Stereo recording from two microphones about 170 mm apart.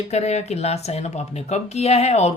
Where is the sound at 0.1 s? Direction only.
40° left (ahead or behind).